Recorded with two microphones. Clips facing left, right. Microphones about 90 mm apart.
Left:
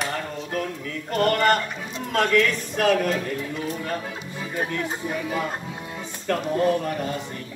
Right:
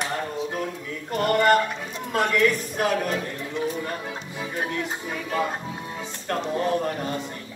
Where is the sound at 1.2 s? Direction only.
10° right (ahead or behind).